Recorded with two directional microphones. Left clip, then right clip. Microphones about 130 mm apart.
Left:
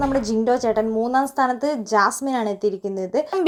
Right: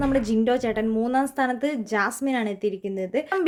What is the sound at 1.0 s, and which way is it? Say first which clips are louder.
A woman's voice: left 3 dB; 40° right (ahead or behind).